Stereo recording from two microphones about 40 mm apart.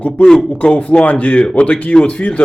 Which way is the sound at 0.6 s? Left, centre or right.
Left.